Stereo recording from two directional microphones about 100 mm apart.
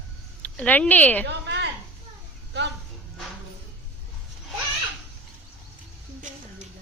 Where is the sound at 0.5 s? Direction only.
15° left (ahead or behind).